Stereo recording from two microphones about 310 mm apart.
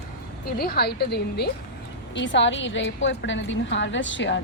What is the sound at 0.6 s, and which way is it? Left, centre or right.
A woman's voice, left.